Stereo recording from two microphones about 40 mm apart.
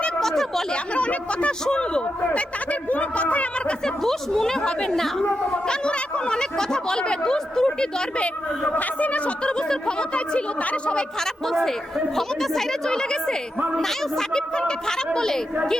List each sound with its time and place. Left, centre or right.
0.2 s a sound: centre
0.7 s speech: left
1.6 s speech: left
2.9 s speech: left
3.8 s a woman's voice: centre
4.9 s a woman's voice: centre
5.6 s speech: left
8.7 s speech: left
10.6 s speech: left
11.4 s a woman's voice: centre
12.9 s a woman's voice: centre